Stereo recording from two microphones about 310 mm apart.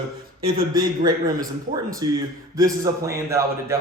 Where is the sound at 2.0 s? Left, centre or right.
Centre.